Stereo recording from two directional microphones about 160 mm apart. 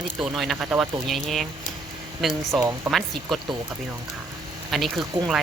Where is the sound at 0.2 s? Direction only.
Centre (ahead or behind).